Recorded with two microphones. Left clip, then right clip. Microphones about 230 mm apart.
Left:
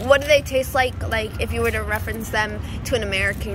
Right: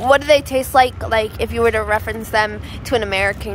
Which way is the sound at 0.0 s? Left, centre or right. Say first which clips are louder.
Right 3 dB; centre.